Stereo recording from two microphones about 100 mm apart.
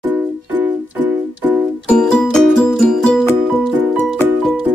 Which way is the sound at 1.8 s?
10° left (ahead or behind).